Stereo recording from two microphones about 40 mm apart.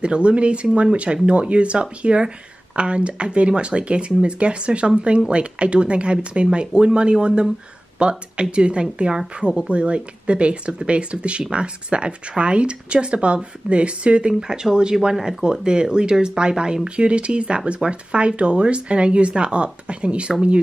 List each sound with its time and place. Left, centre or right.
0.0 s speech: right